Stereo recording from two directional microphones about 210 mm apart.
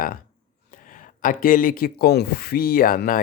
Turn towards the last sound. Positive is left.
turn(degrees=40)  # may be behind; listen again after turning